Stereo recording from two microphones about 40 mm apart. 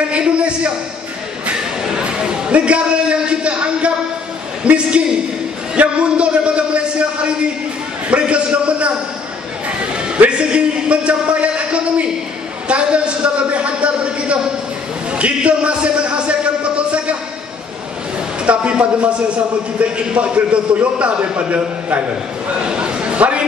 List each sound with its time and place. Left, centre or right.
0.1 s a man's voice: right
1.9 s a sound: right
4.6 s a man's voice: right
8.1 s a man's voice: right
10.2 s a man's voice: right
15.4 s a man's voice: right
18.4 s a man's voice: right
22.7 s a man's voice: right